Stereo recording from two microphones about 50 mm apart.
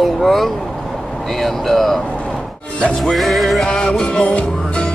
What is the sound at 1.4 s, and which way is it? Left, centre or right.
Music, centre.